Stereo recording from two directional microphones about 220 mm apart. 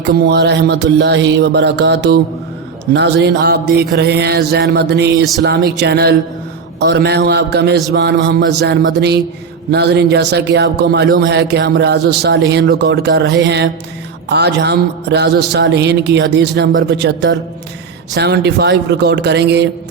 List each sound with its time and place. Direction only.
0.1 s mantra: 45° right (ahead or behind)